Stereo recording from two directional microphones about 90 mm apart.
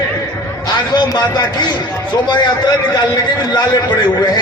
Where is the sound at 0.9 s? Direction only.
50° left (ahead or behind).